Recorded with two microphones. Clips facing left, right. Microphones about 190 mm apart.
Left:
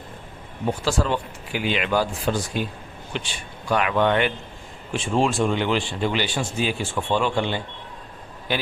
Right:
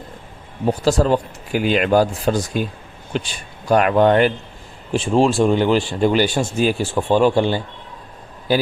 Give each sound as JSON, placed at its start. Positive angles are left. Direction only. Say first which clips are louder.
{"t": 0.7, "sound": "speech", "louder": "right 7 dB", "side_deg": -40}